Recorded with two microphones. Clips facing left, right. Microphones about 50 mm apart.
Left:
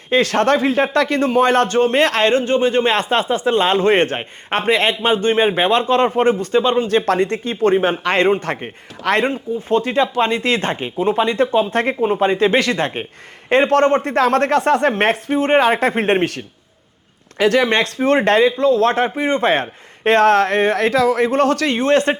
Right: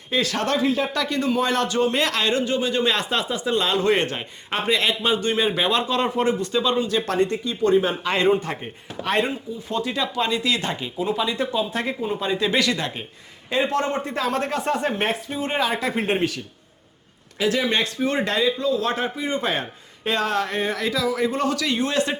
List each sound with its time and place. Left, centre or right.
0.1 s speech: left
7.3 s speech: left
7.7 s speech: left
11.9 s speech: left
13.5 s speech: left